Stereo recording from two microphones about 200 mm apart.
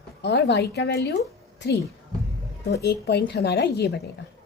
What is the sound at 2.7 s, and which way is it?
A woman's voice, 55° left (ahead or behind).